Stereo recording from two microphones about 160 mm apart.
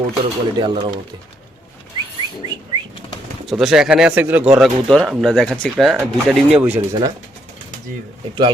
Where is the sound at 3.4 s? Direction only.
Centre (ahead or behind).